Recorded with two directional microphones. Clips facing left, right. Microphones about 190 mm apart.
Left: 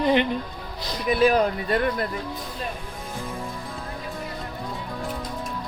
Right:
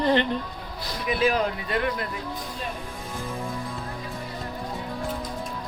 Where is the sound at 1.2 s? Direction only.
40° left (ahead or behind).